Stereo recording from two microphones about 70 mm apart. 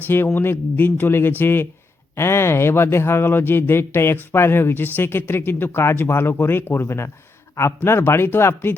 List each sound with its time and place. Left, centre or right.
0.3 s speech: left